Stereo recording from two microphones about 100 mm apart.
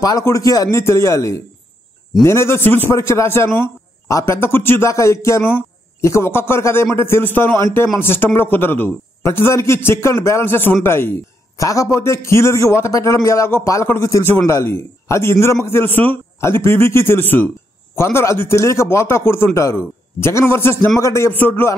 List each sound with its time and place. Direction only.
0.2 s a man's voice: 35° left (ahead or behind)